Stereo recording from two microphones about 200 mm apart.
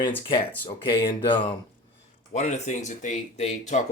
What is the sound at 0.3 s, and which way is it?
Speech, 25° left (ahead or behind).